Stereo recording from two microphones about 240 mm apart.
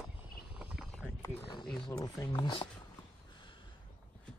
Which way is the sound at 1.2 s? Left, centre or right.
Centre.